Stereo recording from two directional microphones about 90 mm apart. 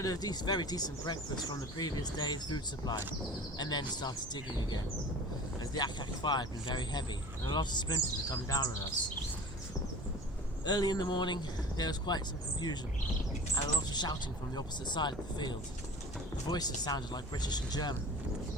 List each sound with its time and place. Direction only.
0.0 s speech: 45° left (ahead or behind)
10.7 s speech: 50° left (ahead or behind)
13.9 s speech: 50° left (ahead or behind)